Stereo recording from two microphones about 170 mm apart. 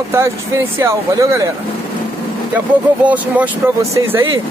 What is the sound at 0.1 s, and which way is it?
Speech, 15° right (ahead or behind).